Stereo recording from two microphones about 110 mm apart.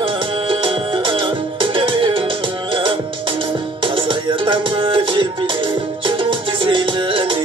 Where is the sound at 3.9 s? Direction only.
50° right (ahead or behind).